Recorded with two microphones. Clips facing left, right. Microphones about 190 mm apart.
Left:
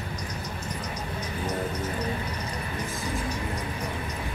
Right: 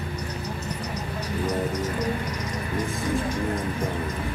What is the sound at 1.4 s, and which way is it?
Music, 90° right.